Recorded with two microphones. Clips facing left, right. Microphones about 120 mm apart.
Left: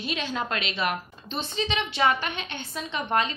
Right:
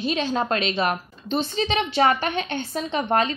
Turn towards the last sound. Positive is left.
turn(degrees=-40)  # may be behind; listen again after turning